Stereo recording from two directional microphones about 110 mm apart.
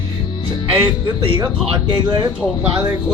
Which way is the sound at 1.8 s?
45° right (ahead or behind).